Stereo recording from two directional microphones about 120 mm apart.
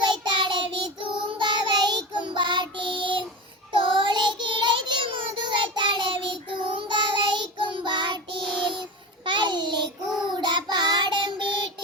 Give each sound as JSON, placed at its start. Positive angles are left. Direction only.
{"t": 0.0, "sound": "child singing", "side_deg": -40}